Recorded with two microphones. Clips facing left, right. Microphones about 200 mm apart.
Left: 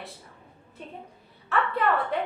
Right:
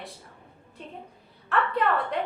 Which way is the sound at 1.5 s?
Centre (ahead or behind).